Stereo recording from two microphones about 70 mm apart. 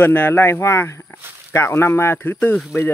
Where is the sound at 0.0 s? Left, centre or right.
Left.